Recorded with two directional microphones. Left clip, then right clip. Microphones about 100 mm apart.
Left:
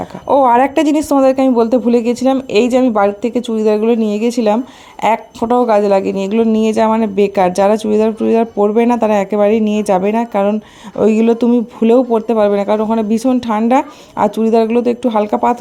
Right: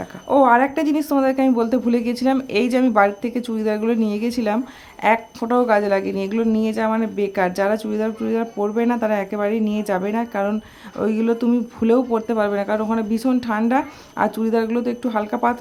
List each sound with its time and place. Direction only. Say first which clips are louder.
0.3 s a woman's voice: left 5 dB; 75° left (ahead or behind); by 1.1 s 60° left (ahead or behind)
1.2 s speech: left 9 dB; 40° left (ahead or behind)
1.5 s a woman's voice: left 7 dB; 25° left (ahead or behind)
5.0 s a woman's voice: left 4 dB; 45° left (ahead or behind)
5.5 s a woman's voice: left 6 dB; 35° left (ahead or behind)
11.0 s a woman's voice: left 9 dB; 55° left (ahead or behind)
11.4 s a woman's voice: left 7 dB; 35° left (ahead or behind)